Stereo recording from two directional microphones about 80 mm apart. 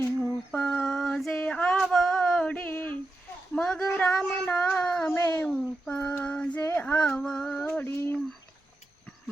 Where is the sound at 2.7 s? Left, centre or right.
Left.